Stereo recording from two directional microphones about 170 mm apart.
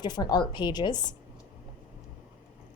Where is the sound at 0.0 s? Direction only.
25° left (ahead or behind).